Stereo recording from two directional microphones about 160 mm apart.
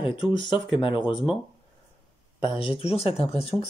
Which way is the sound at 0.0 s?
30° left (ahead or behind).